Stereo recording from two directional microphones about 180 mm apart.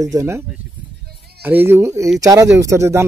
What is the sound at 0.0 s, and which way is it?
Speech, 20° right (ahead or behind).